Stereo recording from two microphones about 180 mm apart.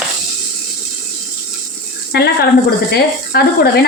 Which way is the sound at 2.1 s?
60° left (ahead or behind).